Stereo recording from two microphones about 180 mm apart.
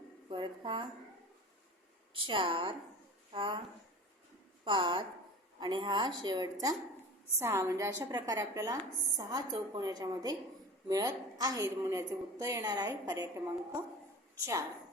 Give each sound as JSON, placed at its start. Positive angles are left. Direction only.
{"t": 0.3, "sound": "a woman's voice", "side_deg": -25}
{"t": 2.1, "sound": "a woman's voice", "side_deg": -30}
{"t": 4.6, "sound": "a woman's voice", "side_deg": -25}